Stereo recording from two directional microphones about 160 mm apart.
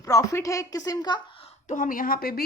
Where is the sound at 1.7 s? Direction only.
55° left (ahead or behind).